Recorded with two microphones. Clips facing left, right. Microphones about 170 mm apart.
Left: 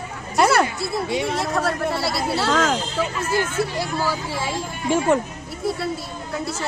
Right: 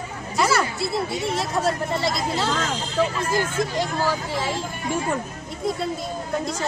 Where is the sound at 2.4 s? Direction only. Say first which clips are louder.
Left 5 dB; 80° left.